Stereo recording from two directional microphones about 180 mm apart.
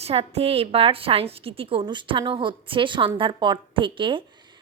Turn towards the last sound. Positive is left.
turn(degrees=-25)  # may be behind; listen again after turning